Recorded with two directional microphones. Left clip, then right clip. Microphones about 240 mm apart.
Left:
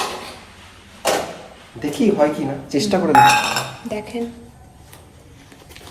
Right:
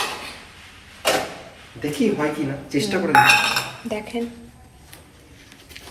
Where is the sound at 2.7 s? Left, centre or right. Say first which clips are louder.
Left 3 dB; left.